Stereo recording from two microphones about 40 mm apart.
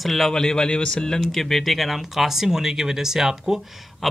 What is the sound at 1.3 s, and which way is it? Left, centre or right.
Speech, centre.